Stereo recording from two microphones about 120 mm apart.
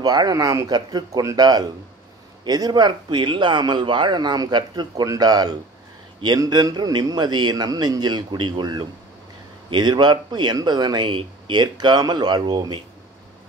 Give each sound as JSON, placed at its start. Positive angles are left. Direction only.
{"t": 0.0, "sound": "speech", "side_deg": -35}